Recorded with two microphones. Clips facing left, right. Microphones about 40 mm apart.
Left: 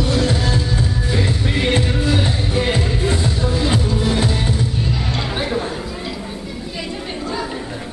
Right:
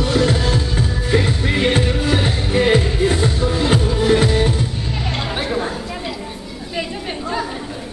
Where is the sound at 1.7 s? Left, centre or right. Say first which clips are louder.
Left 1 dB; right.